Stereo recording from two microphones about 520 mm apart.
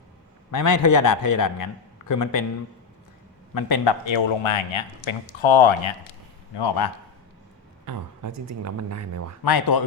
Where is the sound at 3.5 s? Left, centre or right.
Left.